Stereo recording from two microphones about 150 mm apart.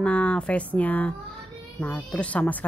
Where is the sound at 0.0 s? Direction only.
10° left (ahead or behind).